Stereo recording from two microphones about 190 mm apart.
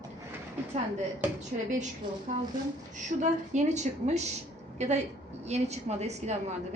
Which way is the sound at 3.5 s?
35° right (ahead or behind).